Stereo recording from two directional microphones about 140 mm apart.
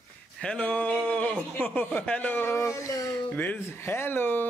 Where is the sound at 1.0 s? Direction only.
10° left (ahead or behind).